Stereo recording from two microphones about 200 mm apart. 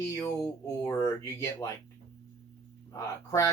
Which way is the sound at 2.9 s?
15° left (ahead or behind).